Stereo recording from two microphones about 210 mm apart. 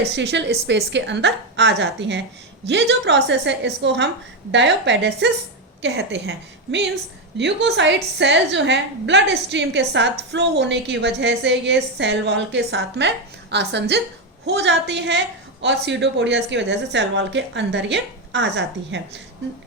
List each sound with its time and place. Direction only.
0.0 s a woman's voice: 55° right (ahead or behind)